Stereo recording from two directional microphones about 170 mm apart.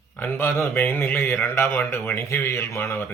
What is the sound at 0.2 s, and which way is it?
A man's voice, 10° left (ahead or behind).